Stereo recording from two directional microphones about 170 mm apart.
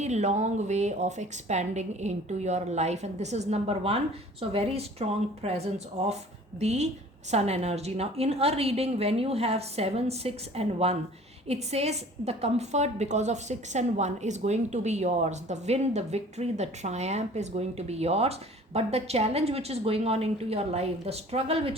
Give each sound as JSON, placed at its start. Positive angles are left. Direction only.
{"t": 0.0, "sound": "a woman's voice", "side_deg": -40}